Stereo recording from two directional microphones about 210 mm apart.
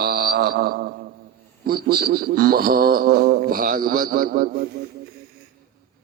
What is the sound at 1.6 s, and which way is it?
A man's voice, 45° right (ahead or behind).